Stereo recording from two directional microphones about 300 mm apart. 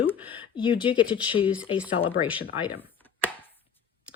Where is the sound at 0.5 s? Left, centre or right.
Centre.